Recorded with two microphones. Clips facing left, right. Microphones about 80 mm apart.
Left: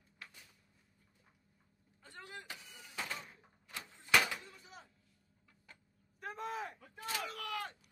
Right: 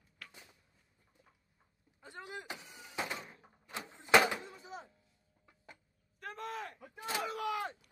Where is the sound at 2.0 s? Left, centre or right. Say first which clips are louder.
Right 4 dB; centre.